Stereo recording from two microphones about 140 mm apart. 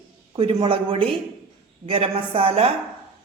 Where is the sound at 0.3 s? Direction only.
40° right (ahead or behind).